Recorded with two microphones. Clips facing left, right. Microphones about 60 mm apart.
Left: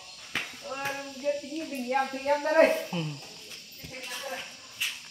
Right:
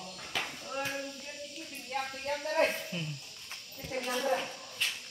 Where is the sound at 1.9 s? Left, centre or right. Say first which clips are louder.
Left 8 dB; left.